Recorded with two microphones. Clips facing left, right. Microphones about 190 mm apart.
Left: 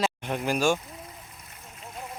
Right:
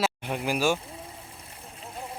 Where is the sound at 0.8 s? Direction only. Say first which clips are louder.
Right 2 dB; 30° right (ahead or behind).